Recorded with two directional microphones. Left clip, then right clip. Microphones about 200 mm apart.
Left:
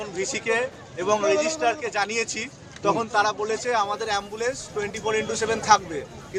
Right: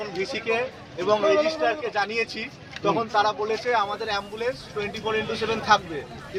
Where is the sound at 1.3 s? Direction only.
30° right (ahead or behind).